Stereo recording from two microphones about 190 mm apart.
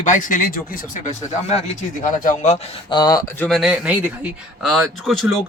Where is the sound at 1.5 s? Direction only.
35° left (ahead or behind).